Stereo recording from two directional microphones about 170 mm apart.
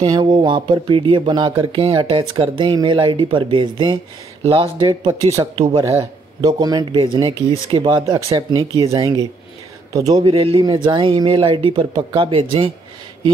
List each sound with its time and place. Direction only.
0.0 s speech: 25° right (ahead or behind)